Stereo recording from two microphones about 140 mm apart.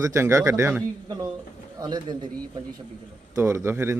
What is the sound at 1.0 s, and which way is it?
Speech, 30° right (ahead or behind).